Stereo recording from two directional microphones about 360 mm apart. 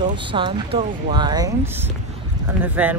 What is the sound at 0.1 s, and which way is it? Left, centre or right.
Speech, centre.